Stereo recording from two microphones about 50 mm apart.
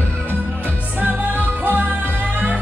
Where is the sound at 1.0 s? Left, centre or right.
Right.